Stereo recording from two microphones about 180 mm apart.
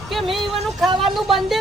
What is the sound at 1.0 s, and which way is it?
Speech, centre (ahead or behind).